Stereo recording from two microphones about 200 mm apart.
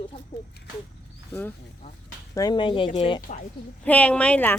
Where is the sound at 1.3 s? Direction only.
10° left (ahead or behind); by 3.4 s 30° left (ahead or behind).